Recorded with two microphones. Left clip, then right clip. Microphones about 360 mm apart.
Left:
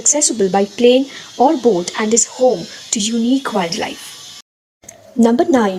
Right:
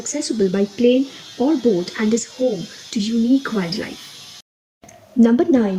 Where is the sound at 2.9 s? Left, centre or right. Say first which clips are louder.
Left 2 dB; centre.